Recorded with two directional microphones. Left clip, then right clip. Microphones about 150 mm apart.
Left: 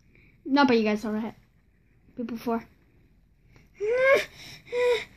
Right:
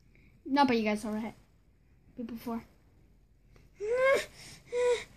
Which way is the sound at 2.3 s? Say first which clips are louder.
Left 11 dB; 30° left (ahead or behind).